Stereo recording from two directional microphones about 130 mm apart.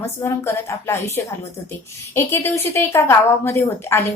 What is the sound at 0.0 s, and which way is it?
A woman's voice, 20° left (ahead or behind).